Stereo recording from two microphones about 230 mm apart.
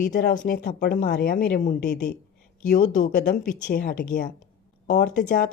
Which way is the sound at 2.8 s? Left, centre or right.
Left.